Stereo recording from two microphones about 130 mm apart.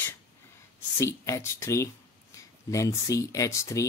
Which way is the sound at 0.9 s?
20° left (ahead or behind).